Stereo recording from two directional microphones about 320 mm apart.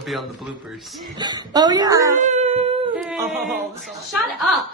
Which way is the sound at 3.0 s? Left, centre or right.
Centre.